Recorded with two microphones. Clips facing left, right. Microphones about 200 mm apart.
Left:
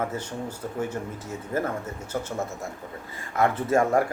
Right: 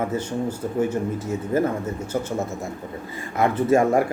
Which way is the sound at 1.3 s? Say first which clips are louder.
Right 5 dB; 20° right (ahead or behind).